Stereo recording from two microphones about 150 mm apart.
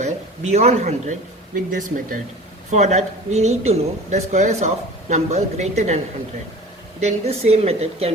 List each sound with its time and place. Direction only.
0.0 s speech: 50° right (ahead or behind)
1.7 s speech: 65° right (ahead or behind)
2.6 s speech: 50° right (ahead or behind)
7.0 s speech: 45° right (ahead or behind)